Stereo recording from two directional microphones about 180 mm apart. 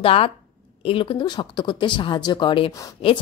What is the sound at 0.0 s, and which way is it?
A woman's voice, 30° left (ahead or behind).